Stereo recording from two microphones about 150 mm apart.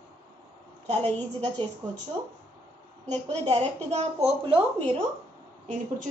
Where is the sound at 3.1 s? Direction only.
45° right (ahead or behind).